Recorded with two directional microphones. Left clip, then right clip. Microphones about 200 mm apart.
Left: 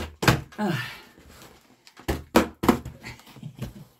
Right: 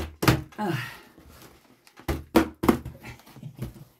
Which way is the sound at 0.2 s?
20° right (ahead or behind).